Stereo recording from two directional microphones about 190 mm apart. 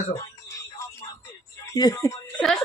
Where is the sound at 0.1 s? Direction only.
15° left (ahead or behind).